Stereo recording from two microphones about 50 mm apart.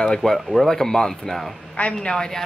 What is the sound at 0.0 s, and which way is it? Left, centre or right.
Speech, centre.